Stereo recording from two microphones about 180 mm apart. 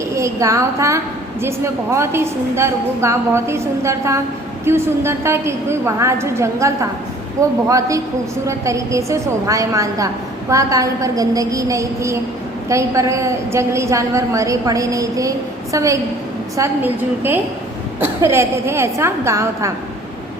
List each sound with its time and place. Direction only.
0.1 s a woman's voice: 15° right (ahead or behind)